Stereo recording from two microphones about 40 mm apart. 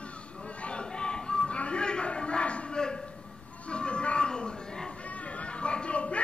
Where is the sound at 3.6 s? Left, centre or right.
Left.